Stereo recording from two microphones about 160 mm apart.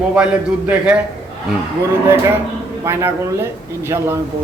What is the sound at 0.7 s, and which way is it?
Speech, 10° right (ahead or behind).